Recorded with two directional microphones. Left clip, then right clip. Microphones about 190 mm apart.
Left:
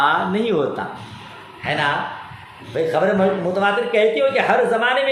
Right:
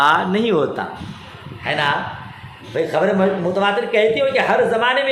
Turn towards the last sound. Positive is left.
turn(degrees=-10)  # may be behind; listen again after turning